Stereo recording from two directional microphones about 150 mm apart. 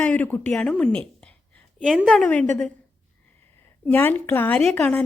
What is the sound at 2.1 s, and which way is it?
Speech, 5° left (ahead or behind).